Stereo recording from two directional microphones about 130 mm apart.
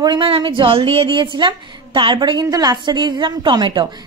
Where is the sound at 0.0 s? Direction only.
35° right (ahead or behind).